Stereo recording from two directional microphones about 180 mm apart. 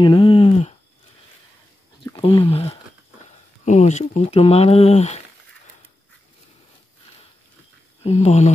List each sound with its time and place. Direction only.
0.0 s speech: 30° left (ahead or behind)
2.2 s speech: 30° left (ahead or behind)
8.0 s speech: 35° left (ahead or behind)